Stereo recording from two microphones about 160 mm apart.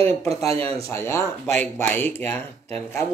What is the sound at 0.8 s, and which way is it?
Speech, 15° left (ahead or behind).